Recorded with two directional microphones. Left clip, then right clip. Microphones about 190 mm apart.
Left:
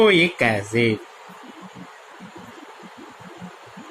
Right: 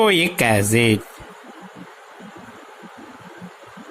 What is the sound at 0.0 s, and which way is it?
Speech, 60° right (ahead or behind).